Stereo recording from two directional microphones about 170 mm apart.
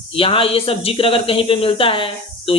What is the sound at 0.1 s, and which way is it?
Speech, 35° left (ahead or behind).